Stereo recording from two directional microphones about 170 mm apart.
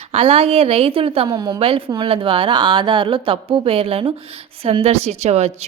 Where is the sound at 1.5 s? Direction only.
35° right (ahead or behind).